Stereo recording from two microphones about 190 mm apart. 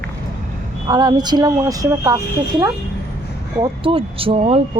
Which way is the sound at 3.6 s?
30° right (ahead or behind).